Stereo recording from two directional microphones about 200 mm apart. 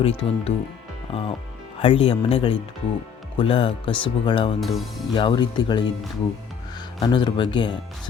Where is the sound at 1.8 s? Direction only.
25° left (ahead or behind).